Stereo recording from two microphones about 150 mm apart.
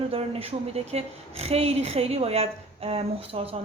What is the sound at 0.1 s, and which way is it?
A woman's voice, 40° right (ahead or behind).